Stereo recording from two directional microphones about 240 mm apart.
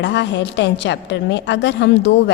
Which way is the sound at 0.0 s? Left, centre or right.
Left.